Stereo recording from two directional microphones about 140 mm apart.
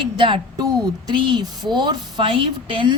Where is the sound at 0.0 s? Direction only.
35° right (ahead or behind).